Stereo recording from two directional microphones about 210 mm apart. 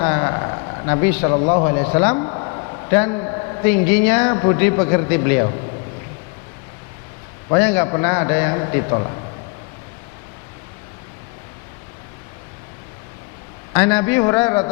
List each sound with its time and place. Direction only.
0.0 s a sound: 20° left (ahead or behind)
2.9 s a man's voice: 15° left (ahead or behind)
7.5 s a man's voice: 10° left (ahead or behind)
13.7 s a man's voice: 10° left (ahead or behind)